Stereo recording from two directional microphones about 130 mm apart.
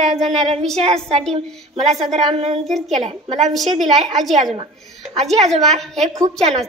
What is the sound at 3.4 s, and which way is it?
A woman's voice, centre (ahead or behind).